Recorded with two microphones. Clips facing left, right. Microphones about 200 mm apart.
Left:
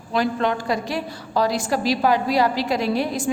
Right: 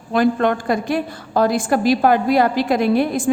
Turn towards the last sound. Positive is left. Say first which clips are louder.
# right 5 dB
turn(degrees=-55)  # may be behind; listen again after turning